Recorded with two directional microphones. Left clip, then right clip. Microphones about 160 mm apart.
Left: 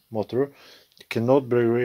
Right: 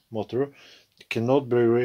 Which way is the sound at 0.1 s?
30° left (ahead or behind).